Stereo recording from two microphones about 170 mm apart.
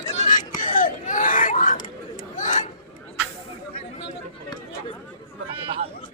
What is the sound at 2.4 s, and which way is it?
Chatter, 45° left (ahead or behind).